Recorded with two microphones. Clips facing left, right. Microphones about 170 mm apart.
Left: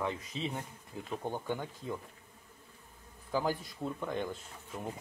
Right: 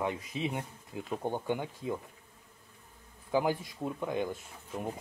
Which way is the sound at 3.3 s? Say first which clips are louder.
Right 4 dB; 15° right (ahead or behind).